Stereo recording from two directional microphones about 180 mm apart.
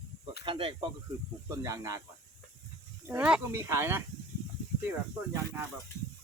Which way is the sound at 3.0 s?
10° right (ahead or behind).